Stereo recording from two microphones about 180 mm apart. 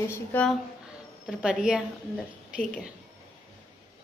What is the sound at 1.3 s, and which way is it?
Speech, 5° right (ahead or behind).